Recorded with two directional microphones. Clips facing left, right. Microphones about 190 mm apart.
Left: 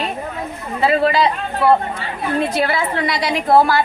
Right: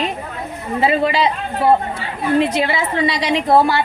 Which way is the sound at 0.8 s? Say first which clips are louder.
Left 1 dB; 25° right (ahead or behind).